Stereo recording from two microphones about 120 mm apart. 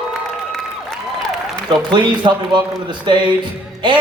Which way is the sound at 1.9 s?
40° right (ahead or behind).